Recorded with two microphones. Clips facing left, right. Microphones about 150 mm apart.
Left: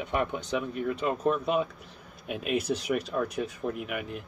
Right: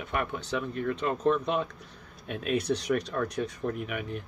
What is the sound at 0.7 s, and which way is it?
Speech, 10° left (ahead or behind).